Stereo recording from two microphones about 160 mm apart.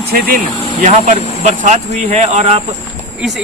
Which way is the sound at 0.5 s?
30° left (ahead or behind).